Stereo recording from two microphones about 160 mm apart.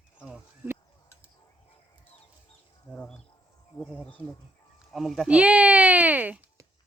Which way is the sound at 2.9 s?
10° left (ahead or behind).